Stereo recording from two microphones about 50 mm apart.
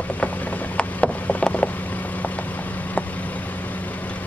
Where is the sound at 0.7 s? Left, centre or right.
Left.